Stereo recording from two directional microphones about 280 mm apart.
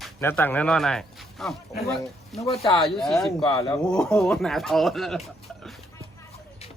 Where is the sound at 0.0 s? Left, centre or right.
Centre.